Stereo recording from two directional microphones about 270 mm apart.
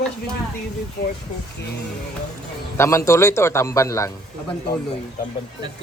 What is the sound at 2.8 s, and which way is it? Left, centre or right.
A man's voice, centre.